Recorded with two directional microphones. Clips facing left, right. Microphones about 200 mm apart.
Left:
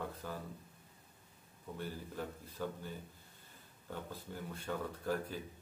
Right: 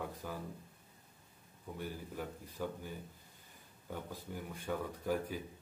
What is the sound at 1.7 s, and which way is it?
Speech, 10° right (ahead or behind).